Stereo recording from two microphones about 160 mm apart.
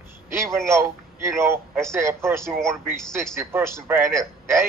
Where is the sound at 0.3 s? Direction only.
15° right (ahead or behind).